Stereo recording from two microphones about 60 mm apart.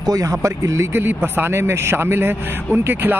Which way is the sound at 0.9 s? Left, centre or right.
Right.